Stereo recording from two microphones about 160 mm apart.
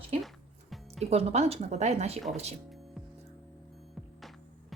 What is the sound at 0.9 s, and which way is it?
Speech, 40° right (ahead or behind).